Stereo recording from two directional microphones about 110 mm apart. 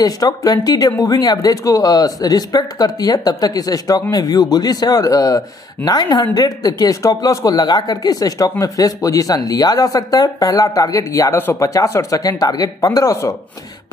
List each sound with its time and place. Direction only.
0.0 s speech: 35° left (ahead or behind)